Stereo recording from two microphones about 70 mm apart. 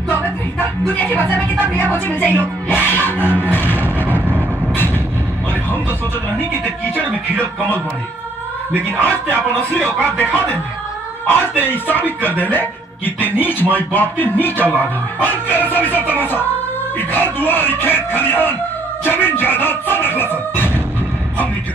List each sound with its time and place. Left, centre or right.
0.1 s music: left
7.0 s speech: right
9.0 s a man's voice: left